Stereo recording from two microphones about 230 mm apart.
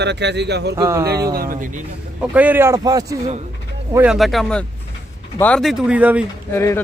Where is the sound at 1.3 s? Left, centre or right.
Right.